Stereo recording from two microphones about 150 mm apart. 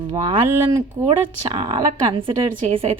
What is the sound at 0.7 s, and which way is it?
Speech, 15° right (ahead or behind).